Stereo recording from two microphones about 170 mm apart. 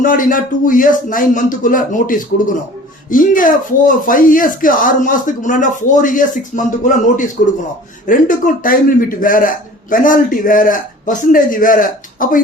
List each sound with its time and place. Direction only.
0.0 s a man's voice: 55° left (ahead or behind)